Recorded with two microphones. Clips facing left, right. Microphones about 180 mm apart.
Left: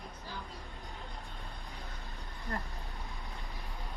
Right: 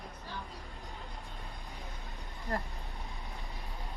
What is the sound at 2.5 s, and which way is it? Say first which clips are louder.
Speech: right 4 dB; 30° right (ahead or behind).